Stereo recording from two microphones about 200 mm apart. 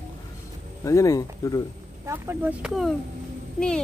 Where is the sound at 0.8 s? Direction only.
15° left (ahead or behind).